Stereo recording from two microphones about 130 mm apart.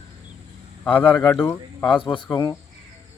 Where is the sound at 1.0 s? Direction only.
35° left (ahead or behind).